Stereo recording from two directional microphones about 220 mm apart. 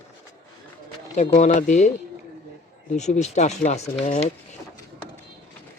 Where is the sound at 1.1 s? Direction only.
30° left (ahead or behind).